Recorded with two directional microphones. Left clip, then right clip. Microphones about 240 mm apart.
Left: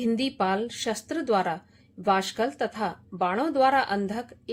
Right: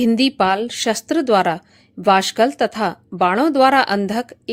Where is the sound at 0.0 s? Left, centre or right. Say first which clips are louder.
Right 10 dB; right.